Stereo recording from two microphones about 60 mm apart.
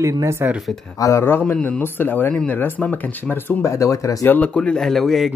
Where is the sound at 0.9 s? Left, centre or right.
Left.